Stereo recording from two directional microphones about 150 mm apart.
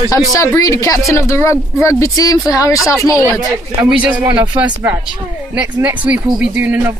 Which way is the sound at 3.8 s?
10° right (ahead or behind).